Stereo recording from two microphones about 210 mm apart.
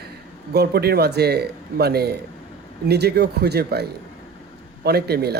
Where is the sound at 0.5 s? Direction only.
50° right (ahead or behind).